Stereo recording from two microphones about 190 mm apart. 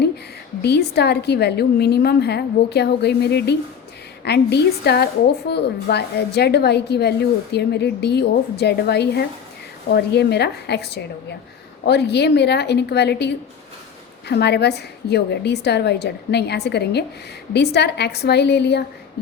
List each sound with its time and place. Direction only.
0.6 s a woman's voice: 60° left (ahead or behind)